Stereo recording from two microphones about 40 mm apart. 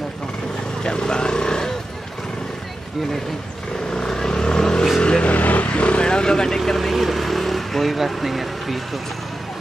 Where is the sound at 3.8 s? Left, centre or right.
Centre.